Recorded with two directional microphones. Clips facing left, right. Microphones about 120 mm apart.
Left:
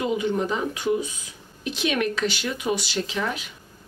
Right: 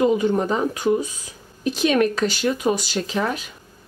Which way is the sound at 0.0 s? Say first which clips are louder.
Right 6 dB; 40° right (ahead or behind).